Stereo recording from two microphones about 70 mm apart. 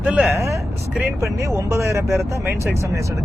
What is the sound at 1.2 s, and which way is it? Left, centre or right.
Speech, right.